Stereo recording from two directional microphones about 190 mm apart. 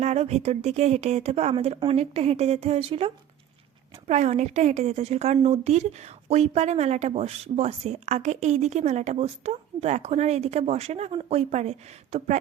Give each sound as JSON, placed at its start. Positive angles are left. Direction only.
{"t": 0.0, "sound": "a woman's voice", "side_deg": -35}